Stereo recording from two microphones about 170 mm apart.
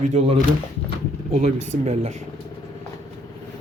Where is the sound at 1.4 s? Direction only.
40° right (ahead or behind).